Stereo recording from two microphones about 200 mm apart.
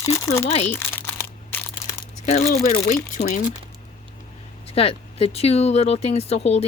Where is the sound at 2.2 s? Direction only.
35° left (ahead or behind).